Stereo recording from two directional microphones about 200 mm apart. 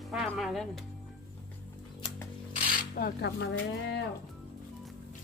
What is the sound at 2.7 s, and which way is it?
Speech, 50° left (ahead or behind).